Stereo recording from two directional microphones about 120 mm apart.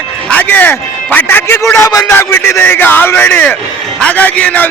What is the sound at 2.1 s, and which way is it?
Speech, 20° left (ahead or behind).